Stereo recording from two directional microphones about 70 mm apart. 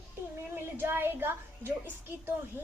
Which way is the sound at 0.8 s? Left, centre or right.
Right.